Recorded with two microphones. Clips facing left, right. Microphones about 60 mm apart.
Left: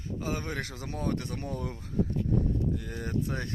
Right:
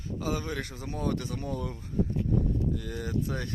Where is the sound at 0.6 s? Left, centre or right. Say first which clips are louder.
Even; left.